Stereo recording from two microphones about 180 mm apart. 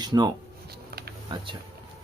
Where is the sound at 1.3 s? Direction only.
30° right (ahead or behind).